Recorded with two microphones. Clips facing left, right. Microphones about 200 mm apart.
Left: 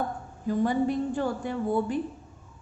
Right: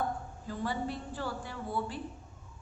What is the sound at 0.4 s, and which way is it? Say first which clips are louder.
A woman's voice: left 11 dB; 20° left (ahead or behind).